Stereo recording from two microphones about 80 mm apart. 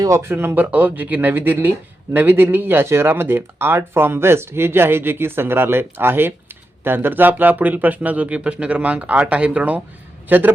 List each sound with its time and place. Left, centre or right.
0.2 s speech: right